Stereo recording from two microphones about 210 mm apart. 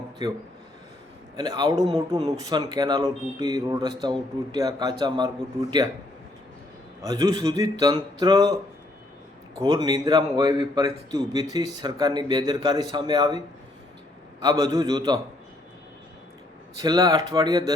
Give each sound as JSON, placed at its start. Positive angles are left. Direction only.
{"t": 0.2, "sound": "speech", "side_deg": -20}
{"t": 1.4, "sound": "speech", "side_deg": -20}
{"t": 7.0, "sound": "a man's voice", "side_deg": -15}
{"t": 9.6, "sound": "speech", "side_deg": -20}
{"t": 14.4, "sound": "speech", "side_deg": -15}
{"t": 16.8, "sound": "speech", "side_deg": -20}